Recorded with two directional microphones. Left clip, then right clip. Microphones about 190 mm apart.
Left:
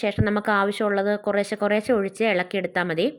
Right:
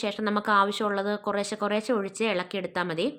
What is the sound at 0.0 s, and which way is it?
A woman's voice, 15° left (ahead or behind).